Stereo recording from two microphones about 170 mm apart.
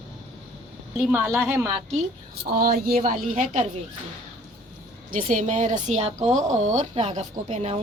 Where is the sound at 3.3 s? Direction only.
45° right (ahead or behind).